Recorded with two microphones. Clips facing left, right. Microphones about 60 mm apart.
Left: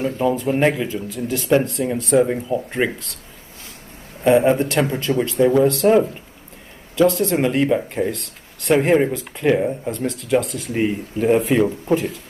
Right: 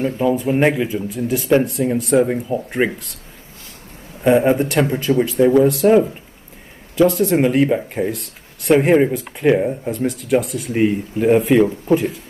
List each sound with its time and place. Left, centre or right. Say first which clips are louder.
0.2 s speech: right 2 dB; centre
4.2 s speech: right 1 dB; centre
8.1 s speech: right 1 dB; left
8.6 s speech: right 3 dB; centre